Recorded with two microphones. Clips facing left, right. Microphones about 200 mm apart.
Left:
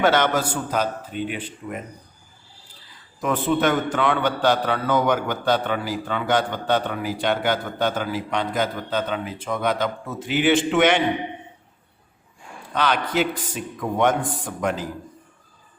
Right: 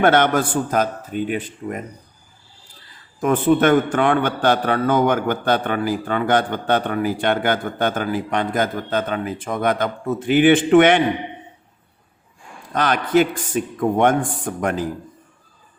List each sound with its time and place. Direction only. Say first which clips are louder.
0.0 s a man's voice: right 3 dB; 55° right (ahead or behind)
3.2 s a man's voice: right 5 dB; 50° right (ahead or behind)
12.7 s a man's voice: right 5 dB; 45° right (ahead or behind)